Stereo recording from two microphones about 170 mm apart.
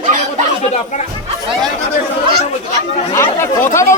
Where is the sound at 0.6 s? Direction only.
45° left (ahead or behind).